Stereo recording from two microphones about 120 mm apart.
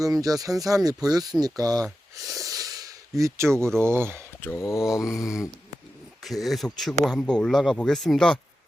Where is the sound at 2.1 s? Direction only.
30° right (ahead or behind).